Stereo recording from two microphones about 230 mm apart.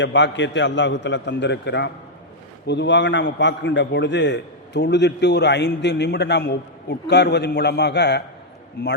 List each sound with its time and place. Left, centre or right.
0.0 s a man's voice: left